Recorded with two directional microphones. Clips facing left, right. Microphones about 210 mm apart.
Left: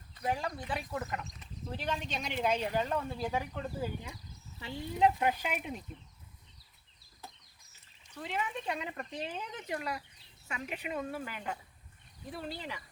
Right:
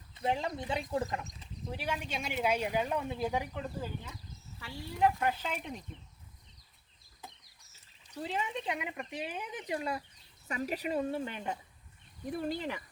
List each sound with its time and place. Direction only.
0.1 s speech: 25° right (ahead or behind)
1.7 s speech: 10° right (ahead or behind)
3.6 s speech: 10° left (ahead or behind)
4.6 s speech: 20° left (ahead or behind)
8.1 s speech: 35° right (ahead or behind); by 9.7 s 15° right (ahead or behind)
9.7 s speech: 25° right (ahead or behind)
10.5 s speech: 40° right (ahead or behind)
12.3 s speech: 50° right (ahead or behind)